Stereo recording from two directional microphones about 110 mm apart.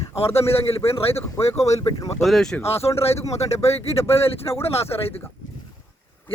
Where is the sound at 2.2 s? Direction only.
5° left (ahead or behind).